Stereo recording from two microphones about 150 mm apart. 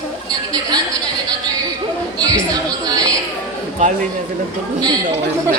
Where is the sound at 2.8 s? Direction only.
25° right (ahead or behind).